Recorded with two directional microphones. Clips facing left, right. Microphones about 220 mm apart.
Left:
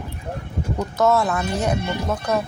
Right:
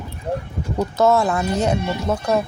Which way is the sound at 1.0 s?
25° right (ahead or behind).